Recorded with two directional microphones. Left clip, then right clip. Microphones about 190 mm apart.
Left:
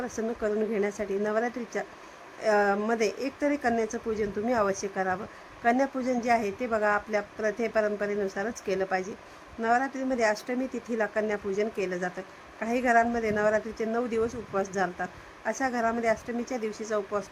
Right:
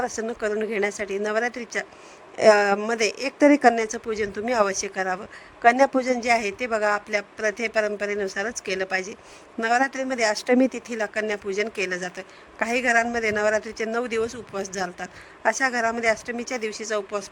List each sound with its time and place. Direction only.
0.0 s speech: 40° right (ahead or behind)